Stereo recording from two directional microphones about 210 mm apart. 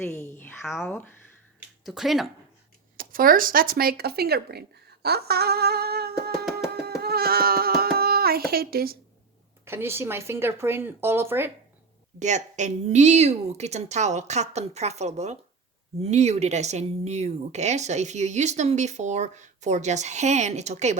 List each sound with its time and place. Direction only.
0.0 s speech: 10° left (ahead or behind)
0.6 s speech: centre (ahead or behind)
3.0 s speech: 40° right (ahead or behind)
6.8 s a sound: 50° right (ahead or behind)
9.6 s speech: 10° right (ahead or behind)
12.2 s speech: 35° right (ahead or behind)